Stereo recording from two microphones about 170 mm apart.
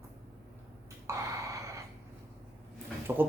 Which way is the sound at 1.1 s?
20° right (ahead or behind).